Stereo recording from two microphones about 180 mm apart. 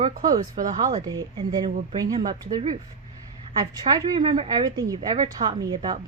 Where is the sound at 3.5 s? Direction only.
20° right (ahead or behind).